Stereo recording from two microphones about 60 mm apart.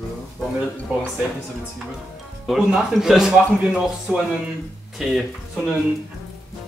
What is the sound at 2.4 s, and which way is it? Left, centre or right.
A man's voice, centre.